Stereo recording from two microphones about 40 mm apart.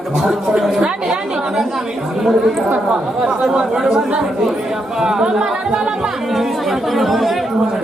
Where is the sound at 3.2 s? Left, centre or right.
Centre.